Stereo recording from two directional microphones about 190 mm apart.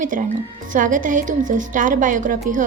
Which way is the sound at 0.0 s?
45° right (ahead or behind).